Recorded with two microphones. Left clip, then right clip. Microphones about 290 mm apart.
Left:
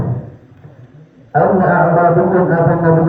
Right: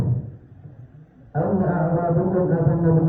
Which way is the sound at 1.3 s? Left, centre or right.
Left.